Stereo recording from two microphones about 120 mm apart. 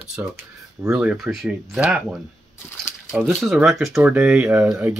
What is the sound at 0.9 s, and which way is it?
Speech, 5° right (ahead or behind).